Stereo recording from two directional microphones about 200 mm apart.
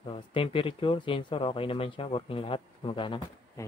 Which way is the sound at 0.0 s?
25° left (ahead or behind).